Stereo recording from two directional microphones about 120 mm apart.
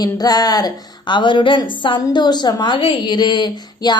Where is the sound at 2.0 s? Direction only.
30° left (ahead or behind).